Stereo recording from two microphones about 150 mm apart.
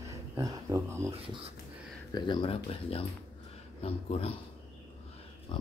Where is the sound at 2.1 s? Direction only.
30° left (ahead or behind).